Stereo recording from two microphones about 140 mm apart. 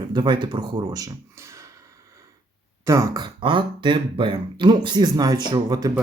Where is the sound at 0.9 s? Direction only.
25° right (ahead or behind).